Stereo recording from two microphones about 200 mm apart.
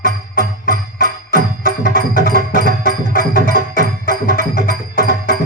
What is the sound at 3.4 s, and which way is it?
Music, 45° right (ahead or behind).